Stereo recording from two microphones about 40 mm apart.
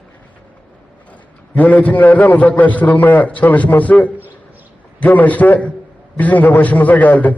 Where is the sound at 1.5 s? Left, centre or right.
Left.